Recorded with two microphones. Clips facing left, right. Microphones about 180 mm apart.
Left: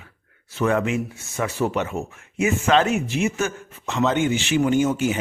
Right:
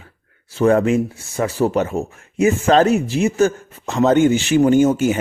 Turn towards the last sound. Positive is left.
turn(degrees=-45)  # may be behind; listen again after turning